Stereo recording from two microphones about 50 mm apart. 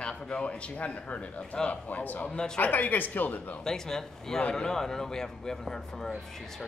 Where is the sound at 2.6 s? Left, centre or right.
Left.